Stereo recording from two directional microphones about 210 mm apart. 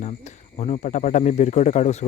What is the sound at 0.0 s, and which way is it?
Speech, 35° left (ahead or behind).